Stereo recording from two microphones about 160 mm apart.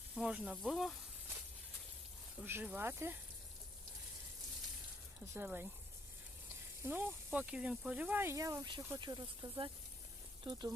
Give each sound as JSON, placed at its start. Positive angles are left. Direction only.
{"t": 0.2, "sound": "speech", "side_deg": -5}
{"t": 2.4, "sound": "speech", "side_deg": -10}
{"t": 5.3, "sound": "speech", "side_deg": -10}
{"t": 6.8, "sound": "speech", "side_deg": -15}